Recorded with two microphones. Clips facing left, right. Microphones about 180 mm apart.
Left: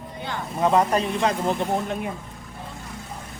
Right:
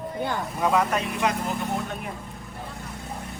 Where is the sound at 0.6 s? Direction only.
30° left (ahead or behind).